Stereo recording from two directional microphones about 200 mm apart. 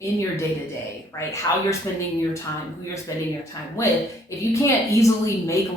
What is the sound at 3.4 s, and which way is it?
A woman's voice, 15° left (ahead or behind).